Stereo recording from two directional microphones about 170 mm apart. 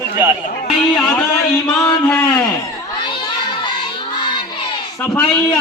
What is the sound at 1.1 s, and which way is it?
Speech, 5° left (ahead or behind).